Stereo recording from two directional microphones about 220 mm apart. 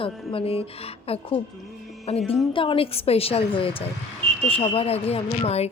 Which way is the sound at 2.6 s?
25° left (ahead or behind).